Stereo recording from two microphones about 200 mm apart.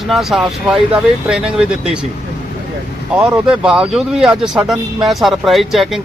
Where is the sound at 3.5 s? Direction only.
5° right (ahead or behind).